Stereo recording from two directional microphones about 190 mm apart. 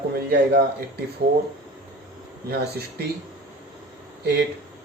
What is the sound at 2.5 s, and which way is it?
Speech, 55° right (ahead or behind).